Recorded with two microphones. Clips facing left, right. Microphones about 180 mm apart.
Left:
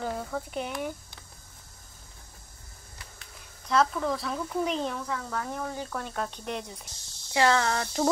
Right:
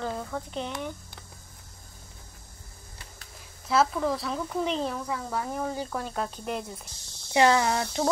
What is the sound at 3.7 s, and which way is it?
Speech, 5° right (ahead or behind).